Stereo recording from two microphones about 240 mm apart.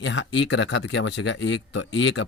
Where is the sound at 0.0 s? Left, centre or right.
Left.